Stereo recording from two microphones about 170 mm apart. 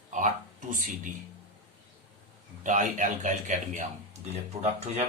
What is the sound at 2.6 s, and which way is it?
Speech, 50° right (ahead or behind).